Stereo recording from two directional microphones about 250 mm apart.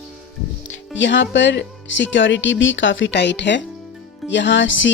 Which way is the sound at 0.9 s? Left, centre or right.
Left.